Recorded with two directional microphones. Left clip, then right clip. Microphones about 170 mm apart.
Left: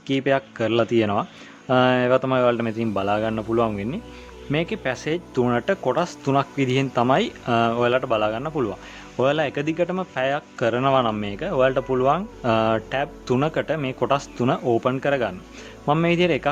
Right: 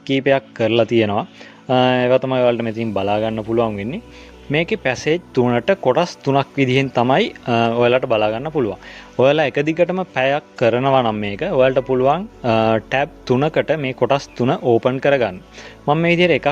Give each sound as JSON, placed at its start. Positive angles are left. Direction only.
{"t": 0.1, "sound": "a man's voice", "side_deg": -20}